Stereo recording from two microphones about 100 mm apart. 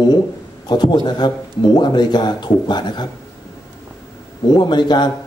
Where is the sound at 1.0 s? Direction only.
45° left (ahead or behind).